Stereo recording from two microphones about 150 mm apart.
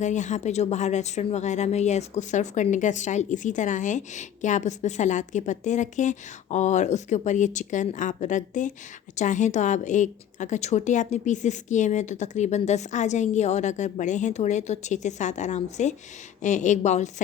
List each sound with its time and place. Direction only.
0.0 s speech: 55° left (ahead or behind)